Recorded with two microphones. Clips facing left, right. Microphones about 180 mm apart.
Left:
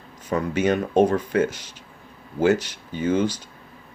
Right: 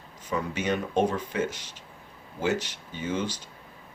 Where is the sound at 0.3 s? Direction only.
50° left (ahead or behind).